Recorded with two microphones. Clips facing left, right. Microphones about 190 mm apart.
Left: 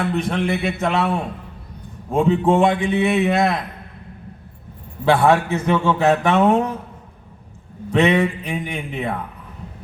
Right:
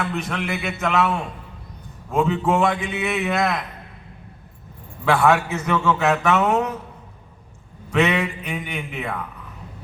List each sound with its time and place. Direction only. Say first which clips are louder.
0.0 s a man's voice: left 5 dB; 30° left (ahead or behind)
5.0 s a man's voice: left 3 dB; 30° left (ahead or behind)
7.9 s a man's voice: left 4 dB; 30° left (ahead or behind)